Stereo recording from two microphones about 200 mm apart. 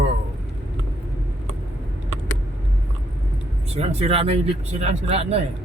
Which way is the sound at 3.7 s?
30° right (ahead or behind).